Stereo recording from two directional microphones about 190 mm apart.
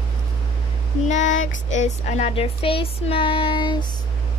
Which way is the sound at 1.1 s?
40° left (ahead or behind).